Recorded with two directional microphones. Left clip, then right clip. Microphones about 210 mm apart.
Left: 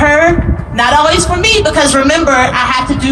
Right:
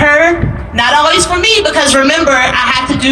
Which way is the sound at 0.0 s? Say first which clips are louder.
Right 1 dB; 35° right (ahead or behind).